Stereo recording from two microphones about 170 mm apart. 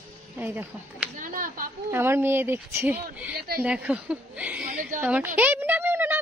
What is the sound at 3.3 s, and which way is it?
Speech, 65° right (ahead or behind).